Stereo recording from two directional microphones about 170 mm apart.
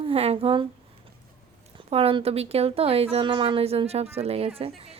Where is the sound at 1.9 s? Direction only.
35° right (ahead or behind).